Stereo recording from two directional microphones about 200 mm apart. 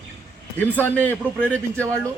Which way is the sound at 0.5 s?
10° left (ahead or behind).